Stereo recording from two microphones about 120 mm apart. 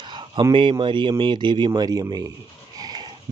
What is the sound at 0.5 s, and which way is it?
Speech, 45° right (ahead or behind).